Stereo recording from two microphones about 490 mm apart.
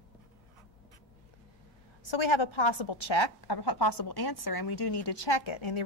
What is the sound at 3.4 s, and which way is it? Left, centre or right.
A woman's voice, left.